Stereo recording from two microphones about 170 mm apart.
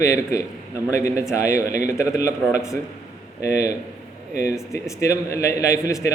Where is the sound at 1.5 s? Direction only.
50° right (ahead or behind).